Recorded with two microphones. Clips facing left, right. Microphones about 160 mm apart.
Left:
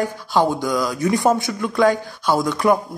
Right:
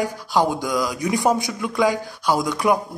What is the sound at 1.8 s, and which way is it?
Speech, centre (ahead or behind).